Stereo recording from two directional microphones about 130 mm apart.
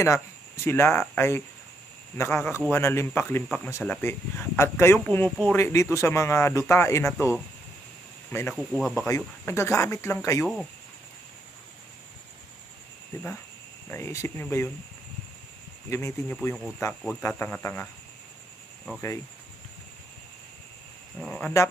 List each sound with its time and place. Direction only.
0.0 s speech: 20° left (ahead or behind)
8.5 s speech: centre (ahead or behind)
8.9 s speech: 20° left (ahead or behind)
10.4 s speech: centre (ahead or behind)
13.8 s speech: 20° left (ahead or behind)
15.9 s speech: 20° left (ahead or behind)
18.9 s speech: 20° left (ahead or behind)
21.2 s speech: 10° left (ahead or behind)